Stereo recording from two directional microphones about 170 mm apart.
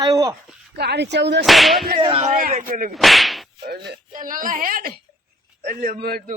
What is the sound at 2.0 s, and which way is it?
Speech, 35° right (ahead or behind).